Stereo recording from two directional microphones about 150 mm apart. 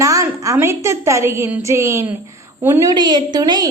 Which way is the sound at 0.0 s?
20° right (ahead or behind).